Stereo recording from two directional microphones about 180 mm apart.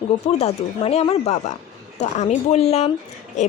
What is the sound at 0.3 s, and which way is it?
Speech, 35° left (ahead or behind).